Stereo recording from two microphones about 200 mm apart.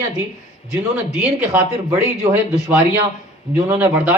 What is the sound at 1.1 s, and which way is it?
Speech, 5° right (ahead or behind).